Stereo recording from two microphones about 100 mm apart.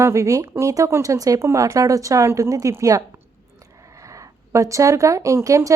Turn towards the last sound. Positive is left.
turn(degrees=-35)  # may be behind; listen again after turning